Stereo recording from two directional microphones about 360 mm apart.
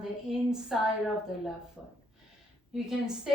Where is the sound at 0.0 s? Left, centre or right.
Centre.